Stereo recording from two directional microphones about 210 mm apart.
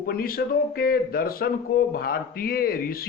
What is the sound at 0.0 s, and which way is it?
Speech, 45° left (ahead or behind).